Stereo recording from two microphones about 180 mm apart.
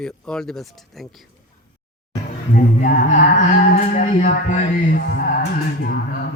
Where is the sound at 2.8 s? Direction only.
45° left (ahead or behind).